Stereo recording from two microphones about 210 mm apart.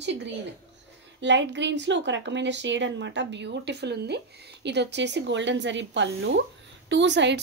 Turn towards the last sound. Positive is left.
turn(degrees=-55)  # may be behind; listen again after turning